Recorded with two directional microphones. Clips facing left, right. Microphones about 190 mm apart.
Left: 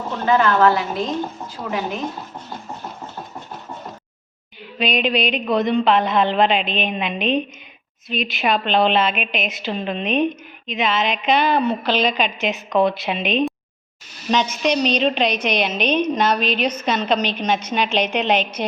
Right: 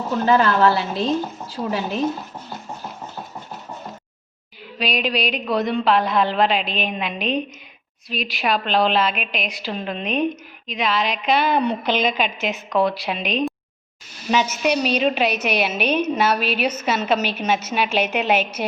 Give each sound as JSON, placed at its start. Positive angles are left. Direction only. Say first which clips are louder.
{"t": 0.3, "sound": "a woman's voice", "louder": "left 1 dB", "side_deg": -35}
{"t": 4.8, "sound": "a woman's voice", "louder": "left 3 dB", "side_deg": 0}